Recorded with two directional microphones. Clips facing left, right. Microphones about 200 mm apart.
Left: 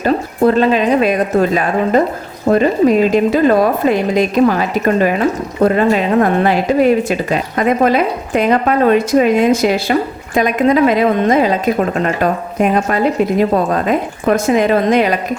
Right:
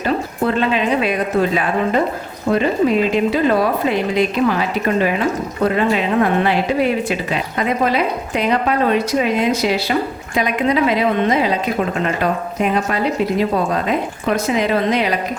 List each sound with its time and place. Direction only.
0.0 s a woman's voice: 40° left (ahead or behind)